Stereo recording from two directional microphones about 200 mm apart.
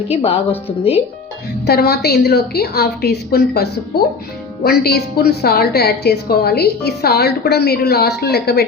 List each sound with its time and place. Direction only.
0.1 s a woman's voice: 30° left (ahead or behind)
1.6 s a woman's voice: 50° left (ahead or behind)